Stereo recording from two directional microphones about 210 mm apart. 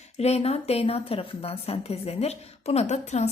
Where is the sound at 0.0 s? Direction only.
30° left (ahead or behind).